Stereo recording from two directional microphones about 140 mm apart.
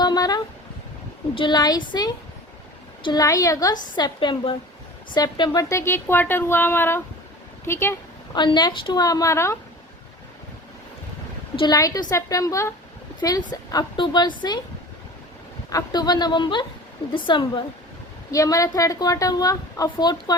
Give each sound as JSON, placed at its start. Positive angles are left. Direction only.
{"t": 0.0, "sound": "a sound", "side_deg": 30}
{"t": 1.4, "sound": "a woman's voice", "side_deg": 30}
{"t": 7.6, "sound": "a sound", "side_deg": 15}
{"t": 8.4, "sound": "a woman's voice", "side_deg": 35}
{"t": 11.5, "sound": "a woman's voice", "side_deg": 30}
{"t": 15.7, "sound": "a woman's voice", "side_deg": 30}
{"t": 18.3, "sound": "a woman's voice", "side_deg": 25}